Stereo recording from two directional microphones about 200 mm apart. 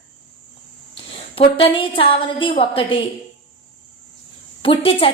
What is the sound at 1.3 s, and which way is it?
A woman's voice, 25° left (ahead or behind).